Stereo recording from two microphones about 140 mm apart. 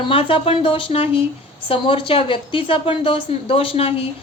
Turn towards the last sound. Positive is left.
turn(degrees=40)  # may be behind; listen again after turning